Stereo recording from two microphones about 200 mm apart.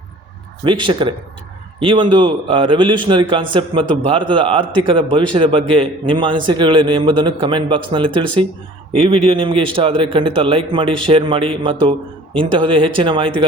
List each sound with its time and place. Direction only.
0.6 s a man's voice: 25° right (ahead or behind)